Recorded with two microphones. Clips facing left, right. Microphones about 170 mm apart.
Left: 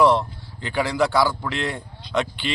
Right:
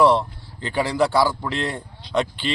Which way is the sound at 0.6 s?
35° right (ahead or behind).